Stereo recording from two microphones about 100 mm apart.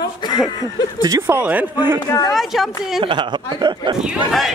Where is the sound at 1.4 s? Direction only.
15° right (ahead or behind).